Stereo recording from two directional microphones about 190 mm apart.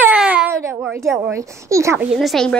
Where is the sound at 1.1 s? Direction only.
15° right (ahead or behind).